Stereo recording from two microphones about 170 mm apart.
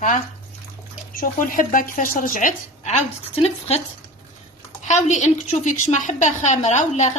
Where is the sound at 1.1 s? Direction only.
55° left (ahead or behind).